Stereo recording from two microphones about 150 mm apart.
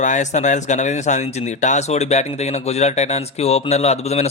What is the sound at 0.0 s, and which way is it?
Speech, 55° left (ahead or behind).